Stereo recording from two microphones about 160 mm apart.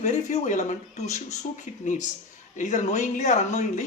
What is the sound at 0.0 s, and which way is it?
Speech, 45° left (ahead or behind).